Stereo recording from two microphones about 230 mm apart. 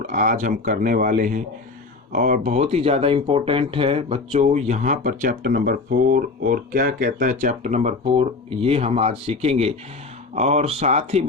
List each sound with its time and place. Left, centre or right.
0.1 s speech: right